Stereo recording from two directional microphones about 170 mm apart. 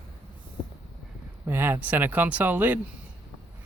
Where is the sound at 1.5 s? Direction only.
10° right (ahead or behind).